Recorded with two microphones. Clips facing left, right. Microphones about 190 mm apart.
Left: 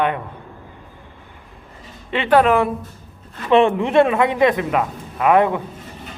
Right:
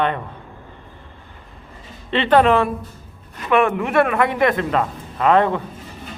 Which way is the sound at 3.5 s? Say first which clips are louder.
Left 3 dB; 25° left (ahead or behind).